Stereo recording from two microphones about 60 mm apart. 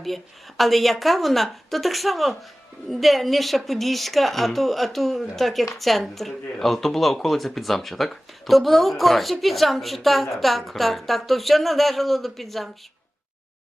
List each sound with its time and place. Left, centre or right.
0.0 s speech: centre